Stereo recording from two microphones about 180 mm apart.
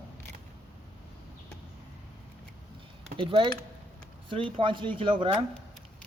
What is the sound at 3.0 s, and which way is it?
Speech, 30° right (ahead or behind).